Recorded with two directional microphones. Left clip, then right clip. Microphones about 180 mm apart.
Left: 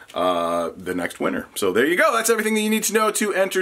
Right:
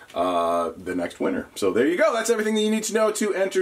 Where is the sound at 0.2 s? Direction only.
25° left (ahead or behind).